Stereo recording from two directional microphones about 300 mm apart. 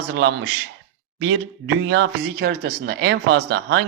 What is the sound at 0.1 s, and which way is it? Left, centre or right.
Speech, right.